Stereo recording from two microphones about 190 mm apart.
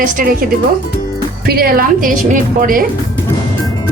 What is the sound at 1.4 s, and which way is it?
Speech, 50° right (ahead or behind).